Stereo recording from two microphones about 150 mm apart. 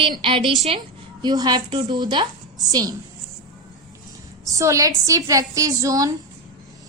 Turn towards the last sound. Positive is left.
turn(degrees=-25)  # may be behind; listen again after turning